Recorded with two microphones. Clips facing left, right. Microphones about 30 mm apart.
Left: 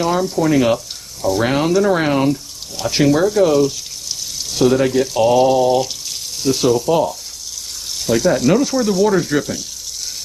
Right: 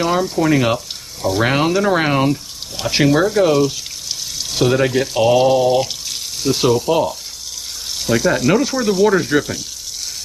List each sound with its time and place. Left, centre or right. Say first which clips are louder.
0.0 s speech: even; centre
8.3 s speech: left 1 dB; centre